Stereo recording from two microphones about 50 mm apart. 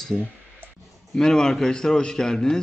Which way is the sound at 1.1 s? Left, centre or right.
Centre.